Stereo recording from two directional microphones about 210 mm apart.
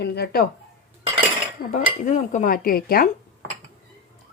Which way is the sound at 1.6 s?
40° left (ahead or behind).